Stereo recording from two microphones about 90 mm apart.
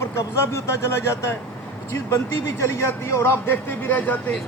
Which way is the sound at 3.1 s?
30° left (ahead or behind).